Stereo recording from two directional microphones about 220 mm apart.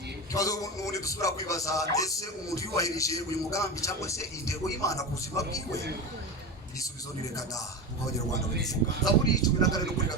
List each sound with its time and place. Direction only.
0.3 s speech: 15° left (ahead or behind)
9.2 s speech: 15° left (ahead or behind)